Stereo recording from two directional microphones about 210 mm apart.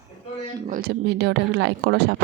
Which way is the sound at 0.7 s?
45° right (ahead or behind).